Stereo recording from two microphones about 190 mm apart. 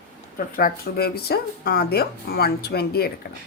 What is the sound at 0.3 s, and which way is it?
Speech, 50° left (ahead or behind).